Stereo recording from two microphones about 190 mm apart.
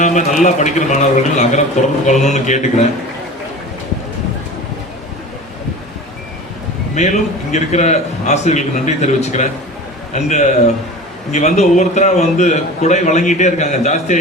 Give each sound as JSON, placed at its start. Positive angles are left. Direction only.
{"t": 0.0, "sound": "a man's voice", "side_deg": 40}
{"t": 6.9, "sound": "a man's voice", "side_deg": 40}